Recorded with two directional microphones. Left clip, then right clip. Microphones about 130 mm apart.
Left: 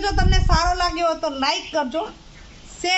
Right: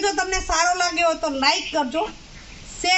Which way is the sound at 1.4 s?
Centre (ahead or behind).